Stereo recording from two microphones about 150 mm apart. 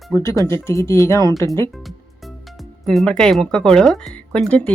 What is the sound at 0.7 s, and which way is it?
Speech, 20° left (ahead or behind).